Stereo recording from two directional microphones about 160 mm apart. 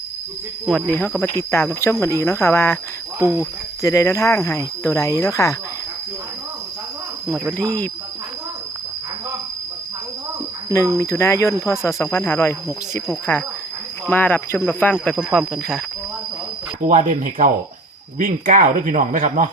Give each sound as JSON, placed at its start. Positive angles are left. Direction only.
{"t": 0.6, "sound": "speech", "side_deg": 5}
{"t": 3.8, "sound": "speech", "side_deg": 20}
{"t": 10.9, "sound": "speech", "side_deg": 20}
{"t": 16.8, "sound": "speech", "side_deg": -55}